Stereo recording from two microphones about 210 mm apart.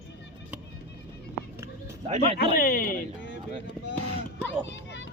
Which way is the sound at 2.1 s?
30° right (ahead or behind).